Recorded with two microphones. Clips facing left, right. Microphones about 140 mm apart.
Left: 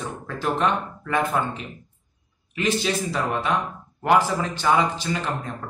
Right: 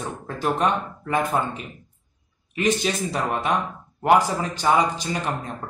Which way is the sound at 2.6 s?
15° right (ahead or behind).